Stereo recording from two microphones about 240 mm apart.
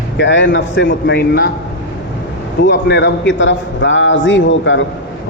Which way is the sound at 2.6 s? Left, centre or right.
Left.